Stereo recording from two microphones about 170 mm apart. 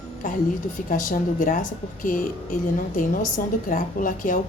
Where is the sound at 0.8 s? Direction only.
50° left (ahead or behind).